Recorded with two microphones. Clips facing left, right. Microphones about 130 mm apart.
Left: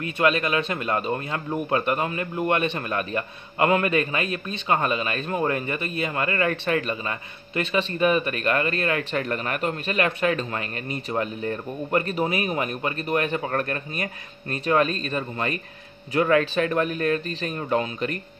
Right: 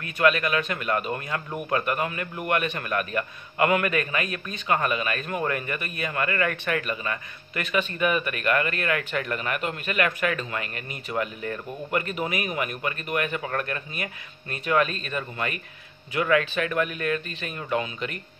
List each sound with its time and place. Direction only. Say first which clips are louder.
0.0 s speech: even; 25° left (ahead or behind)